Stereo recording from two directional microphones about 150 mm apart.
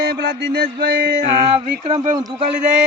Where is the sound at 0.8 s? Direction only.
80° right.